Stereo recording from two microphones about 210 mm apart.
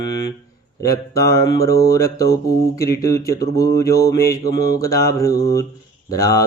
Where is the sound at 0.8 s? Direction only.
15° left (ahead or behind).